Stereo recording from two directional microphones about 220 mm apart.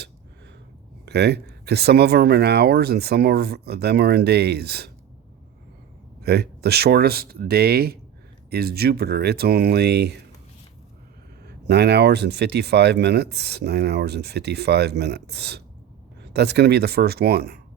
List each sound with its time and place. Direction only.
1.0 s speech: 50° right (ahead or behind)
6.2 s speech: 45° right (ahead or behind)
11.4 s speech: 50° right (ahead or behind)